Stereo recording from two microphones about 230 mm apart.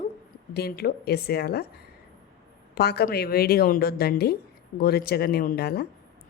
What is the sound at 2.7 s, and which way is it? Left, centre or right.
Speech, left.